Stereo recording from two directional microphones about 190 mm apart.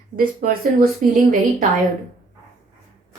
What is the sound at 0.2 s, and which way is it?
Speech, 50° right (ahead or behind).